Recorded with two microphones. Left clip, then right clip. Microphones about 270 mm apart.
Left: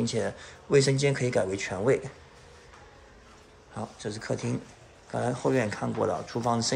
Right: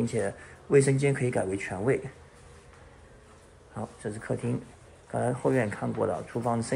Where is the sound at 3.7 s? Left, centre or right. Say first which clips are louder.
Left 1 dB; centre.